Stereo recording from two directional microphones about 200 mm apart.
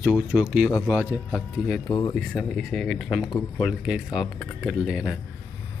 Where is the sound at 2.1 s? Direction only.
Centre (ahead or behind).